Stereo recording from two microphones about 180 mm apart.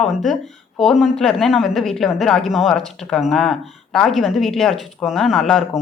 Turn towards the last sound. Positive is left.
turn(degrees=0)  # may be behind; listen again after turning